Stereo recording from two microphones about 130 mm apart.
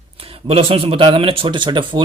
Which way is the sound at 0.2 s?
45° right (ahead or behind).